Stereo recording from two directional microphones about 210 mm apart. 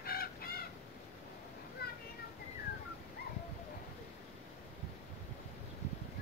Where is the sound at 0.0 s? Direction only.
45° left (ahead or behind).